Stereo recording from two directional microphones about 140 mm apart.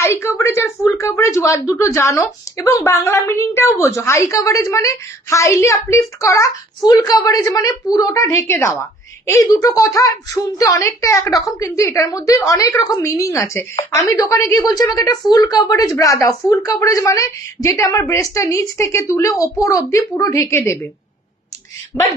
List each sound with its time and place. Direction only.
0.0 s speech: 20° left (ahead or behind)